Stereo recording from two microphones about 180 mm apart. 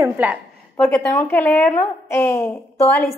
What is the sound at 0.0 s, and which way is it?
Speech, 10° right (ahead or behind).